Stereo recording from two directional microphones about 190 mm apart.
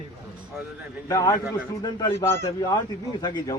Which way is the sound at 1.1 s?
20° left (ahead or behind).